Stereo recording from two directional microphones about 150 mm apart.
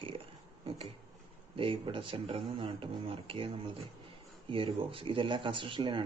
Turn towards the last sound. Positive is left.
turn(degrees=-35)  # may be behind; listen again after turning